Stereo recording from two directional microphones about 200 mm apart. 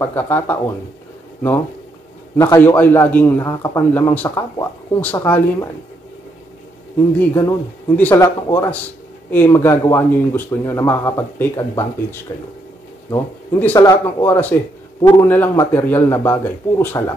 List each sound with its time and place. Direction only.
0.0 s a man's voice: 10° left (ahead or behind)
2.3 s a man's voice: 10° left (ahead or behind)
7.2 s a man's voice: 10° left (ahead or behind)
15.0 s a man's voice: 20° left (ahead or behind)
15.2 s a man's voice: 10° left (ahead or behind)